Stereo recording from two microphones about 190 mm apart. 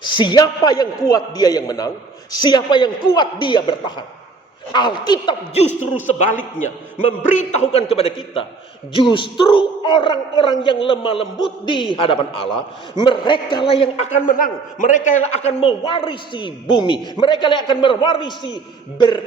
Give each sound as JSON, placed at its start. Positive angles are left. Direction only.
{"t": 0.0, "sound": "a man's voice", "side_deg": 25}
{"t": 5.6, "sound": "a man's voice", "side_deg": 40}